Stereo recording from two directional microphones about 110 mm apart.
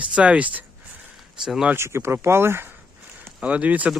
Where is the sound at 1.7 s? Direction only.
25° right (ahead or behind).